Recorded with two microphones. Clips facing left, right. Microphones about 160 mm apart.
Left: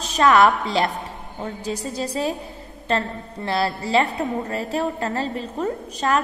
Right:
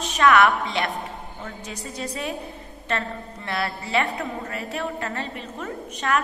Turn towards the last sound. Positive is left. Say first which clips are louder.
# left 3 dB
turn(degrees=35)  # may be behind; listen again after turning